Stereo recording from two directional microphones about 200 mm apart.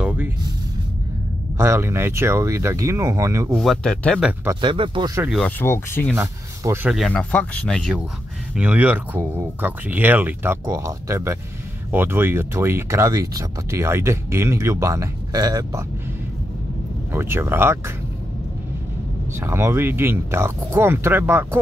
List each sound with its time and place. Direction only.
0.0 s music: 5° right (ahead or behind)
1.6 s speech: 15° right (ahead or behind)
3.5 s speech: centre (ahead or behind)
4.6 s speech: 25° right (ahead or behind)
5.2 s speech: centre (ahead or behind)
5.6 s speech: 10° left (ahead or behind)
6.1 s speech: 10° right (ahead or behind)
17.1 s speech: 10° right (ahead or behind)
19.4 s speech: 10° right (ahead or behind)